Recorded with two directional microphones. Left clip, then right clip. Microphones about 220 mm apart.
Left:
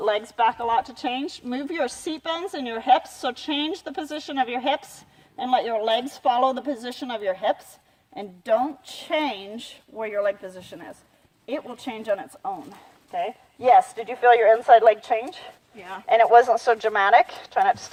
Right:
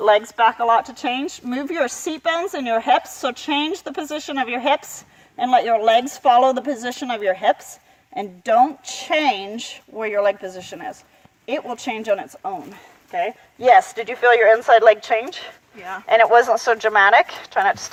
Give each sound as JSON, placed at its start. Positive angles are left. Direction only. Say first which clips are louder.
{"t": 0.0, "sound": "a woman's voice", "louder": "right 7 dB", "side_deg": -45}
{"t": 15.8, "sound": "speech", "louder": "right 6 dB", "side_deg": 0}
{"t": 16.0, "sound": "a woman's voice", "louder": "right 2 dB", "side_deg": -40}